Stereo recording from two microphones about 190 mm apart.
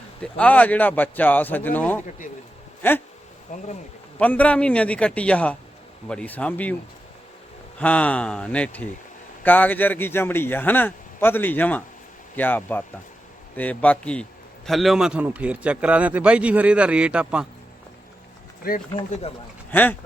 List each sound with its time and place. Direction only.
0.2 s speech: 5° left (ahead or behind)
3.5 s speech: 40° left (ahead or behind)
4.2 s speech: 5° left (ahead or behind)
7.8 s a man's voice: 5° left (ahead or behind)
18.6 s speech: 50° left (ahead or behind)
19.7 s speech: 10° left (ahead or behind)